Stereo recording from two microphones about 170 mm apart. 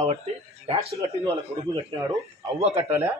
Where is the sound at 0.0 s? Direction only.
40° right (ahead or behind).